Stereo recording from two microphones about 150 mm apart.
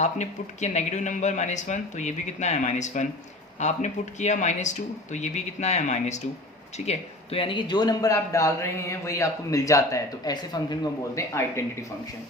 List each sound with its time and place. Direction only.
0.0 s speech: 50° left (ahead or behind); by 11.9 s 20° left (ahead or behind)